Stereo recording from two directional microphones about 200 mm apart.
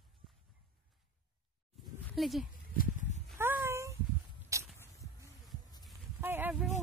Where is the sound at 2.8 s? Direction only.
40° left (ahead or behind).